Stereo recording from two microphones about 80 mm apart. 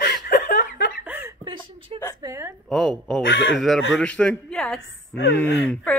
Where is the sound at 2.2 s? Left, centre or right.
Right.